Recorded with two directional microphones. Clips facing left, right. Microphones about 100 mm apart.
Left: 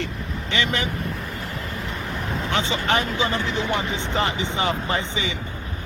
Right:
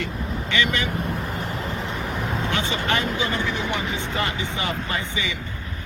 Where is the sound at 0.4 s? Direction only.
25° left (ahead or behind).